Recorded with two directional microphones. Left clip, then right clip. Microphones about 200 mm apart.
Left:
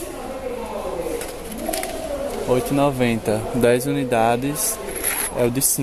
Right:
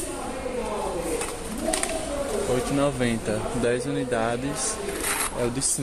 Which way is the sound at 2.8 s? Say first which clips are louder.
Left 5 dB; 35° left (ahead or behind).